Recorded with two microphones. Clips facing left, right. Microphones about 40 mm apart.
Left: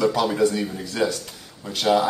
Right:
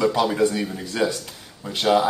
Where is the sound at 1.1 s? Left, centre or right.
Centre.